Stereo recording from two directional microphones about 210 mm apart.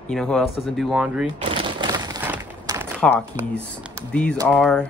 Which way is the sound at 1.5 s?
25° right (ahead or behind).